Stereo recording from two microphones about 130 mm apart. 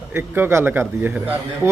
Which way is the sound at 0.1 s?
15° right (ahead or behind).